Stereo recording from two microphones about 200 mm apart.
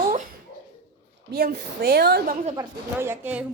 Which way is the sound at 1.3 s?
50° right (ahead or behind).